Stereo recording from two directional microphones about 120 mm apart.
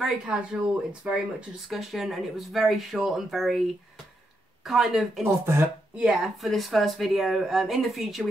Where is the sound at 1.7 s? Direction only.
Centre (ahead or behind).